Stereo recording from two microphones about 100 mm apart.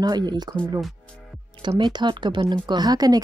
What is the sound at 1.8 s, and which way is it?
Speech, 50° right (ahead or behind).